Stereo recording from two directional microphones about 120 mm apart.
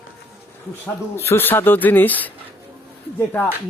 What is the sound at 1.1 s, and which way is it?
Speech, 20° left (ahead or behind).